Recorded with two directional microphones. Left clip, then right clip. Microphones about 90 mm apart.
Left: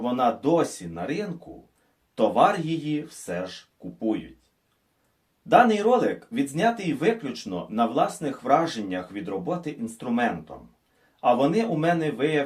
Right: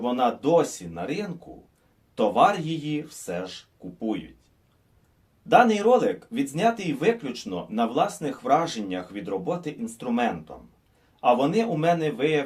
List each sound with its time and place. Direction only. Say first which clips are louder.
0.0 s speech: even; 30° right (ahead or behind)
5.5 s speech: even; 25° right (ahead or behind)